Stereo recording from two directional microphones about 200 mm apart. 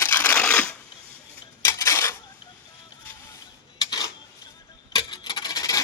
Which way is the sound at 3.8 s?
20° left (ahead or behind).